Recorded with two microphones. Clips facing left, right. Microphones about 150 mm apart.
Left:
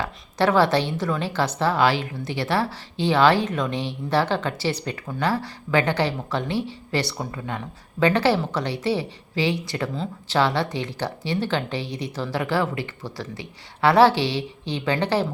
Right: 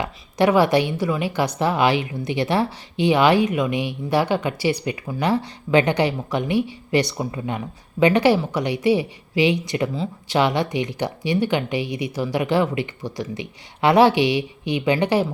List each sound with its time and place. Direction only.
0.0 s a woman's voice: 15° right (ahead or behind)
9.9 s speech: 5° right (ahead or behind)
10.3 s a woman's voice: 15° right (ahead or behind)